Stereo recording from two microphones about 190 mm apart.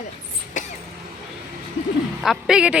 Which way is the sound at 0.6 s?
40° left (ahead or behind).